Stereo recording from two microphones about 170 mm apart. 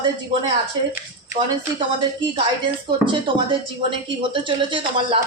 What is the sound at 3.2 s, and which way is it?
Speech, 30° right (ahead or behind).